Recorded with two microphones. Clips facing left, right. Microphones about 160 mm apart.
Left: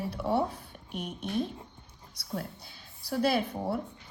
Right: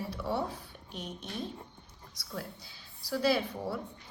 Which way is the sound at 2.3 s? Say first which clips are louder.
Left 4 dB; 55° left (ahead or behind).